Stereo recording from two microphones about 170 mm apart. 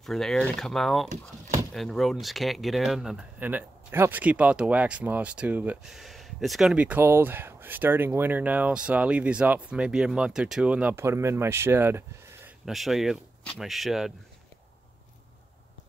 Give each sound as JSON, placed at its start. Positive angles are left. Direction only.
{"t": 0.0, "sound": "speech", "side_deg": 0}
{"t": 1.0, "sound": "speech", "side_deg": -45}
{"t": 1.7, "sound": "speech", "side_deg": 0}
{"t": 12.6, "sound": "speech", "side_deg": 0}